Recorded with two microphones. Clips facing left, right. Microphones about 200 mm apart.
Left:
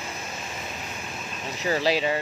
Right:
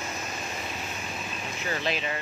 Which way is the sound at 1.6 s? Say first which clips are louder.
Left 7 dB; 35° left (ahead or behind).